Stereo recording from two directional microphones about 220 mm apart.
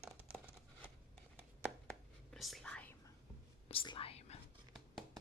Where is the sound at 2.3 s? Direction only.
Centre (ahead or behind).